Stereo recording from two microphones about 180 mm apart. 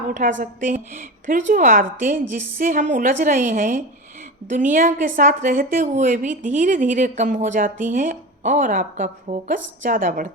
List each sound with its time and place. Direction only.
0.1 s a woman's voice: 45° right (ahead or behind)